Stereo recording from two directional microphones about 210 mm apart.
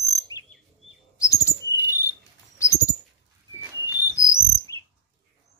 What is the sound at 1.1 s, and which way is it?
Bird flight, 15° left (ahead or behind).